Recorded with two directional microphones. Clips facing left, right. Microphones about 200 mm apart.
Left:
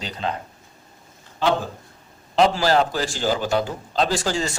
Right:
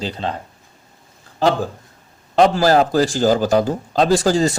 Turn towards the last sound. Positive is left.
turn(degrees=-40)  # may be behind; listen again after turning